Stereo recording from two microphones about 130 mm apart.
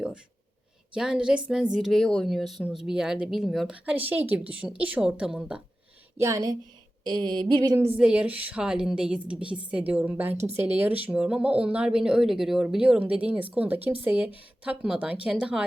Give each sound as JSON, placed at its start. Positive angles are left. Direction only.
{"t": 0.9, "sound": "speech", "side_deg": -5}
{"t": 6.1, "sound": "speech", "side_deg": -25}
{"t": 7.0, "sound": "a sound", "side_deg": -35}
{"t": 7.9, "sound": "speech", "side_deg": -10}